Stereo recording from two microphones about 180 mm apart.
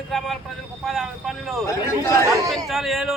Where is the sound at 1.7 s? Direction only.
15° left (ahead or behind).